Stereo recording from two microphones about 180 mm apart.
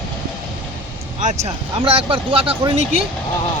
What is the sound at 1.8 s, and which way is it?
Speech, 30° right (ahead or behind).